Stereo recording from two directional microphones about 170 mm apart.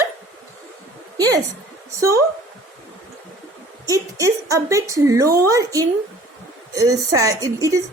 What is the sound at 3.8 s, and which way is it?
A woman's voice, 20° right (ahead or behind).